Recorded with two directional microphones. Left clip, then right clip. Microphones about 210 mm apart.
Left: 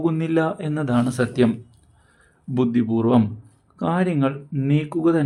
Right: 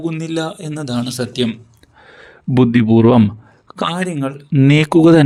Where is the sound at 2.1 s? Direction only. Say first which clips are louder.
Right 10 dB; 35° right (ahead or behind).